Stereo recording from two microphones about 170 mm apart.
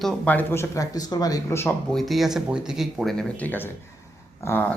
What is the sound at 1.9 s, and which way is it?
A man's voice, centre (ahead or behind).